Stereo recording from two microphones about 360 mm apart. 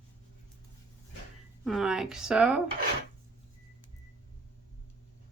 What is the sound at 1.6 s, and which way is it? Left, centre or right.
Speech, centre.